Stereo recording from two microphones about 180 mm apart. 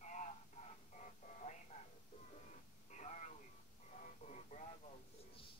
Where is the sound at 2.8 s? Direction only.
40° left (ahead or behind).